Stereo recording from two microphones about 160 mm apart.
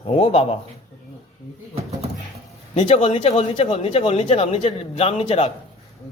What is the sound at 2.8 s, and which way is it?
Speech, 35° left (ahead or behind).